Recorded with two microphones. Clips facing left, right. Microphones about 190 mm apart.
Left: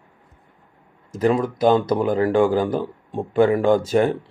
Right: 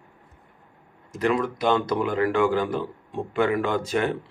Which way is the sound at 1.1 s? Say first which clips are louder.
Left 4 dB; 40° left (ahead or behind).